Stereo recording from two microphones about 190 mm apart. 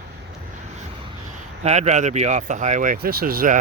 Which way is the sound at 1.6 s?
35° right (ahead or behind).